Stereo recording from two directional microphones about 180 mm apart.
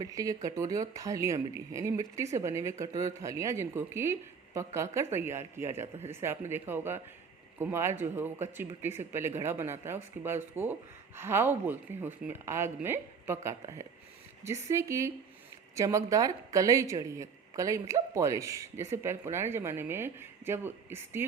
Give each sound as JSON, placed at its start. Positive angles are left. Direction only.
{"t": 0.0, "sound": "a woman's voice", "side_deg": -20}